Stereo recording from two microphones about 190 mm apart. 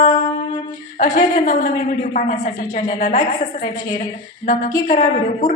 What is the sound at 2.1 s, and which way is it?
A woman's voice, 40° left (ahead or behind).